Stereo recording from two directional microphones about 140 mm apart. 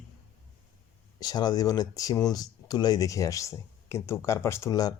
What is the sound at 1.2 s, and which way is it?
Speech, 30° left (ahead or behind).